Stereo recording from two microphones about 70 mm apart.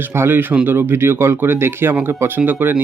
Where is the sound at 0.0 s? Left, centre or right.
Right.